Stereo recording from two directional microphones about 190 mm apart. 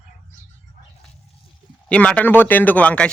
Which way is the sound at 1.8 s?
5° left (ahead or behind).